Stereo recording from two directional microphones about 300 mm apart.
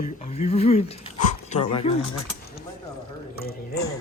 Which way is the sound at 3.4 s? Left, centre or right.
Left.